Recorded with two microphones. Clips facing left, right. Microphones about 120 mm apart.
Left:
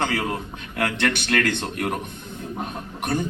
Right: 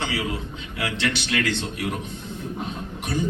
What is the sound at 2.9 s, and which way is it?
Speech, 55° left (ahead or behind).